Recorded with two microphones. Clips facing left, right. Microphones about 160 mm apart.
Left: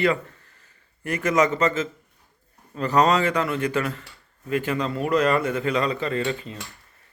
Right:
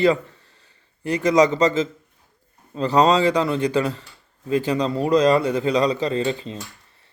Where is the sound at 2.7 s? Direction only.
30° right (ahead or behind).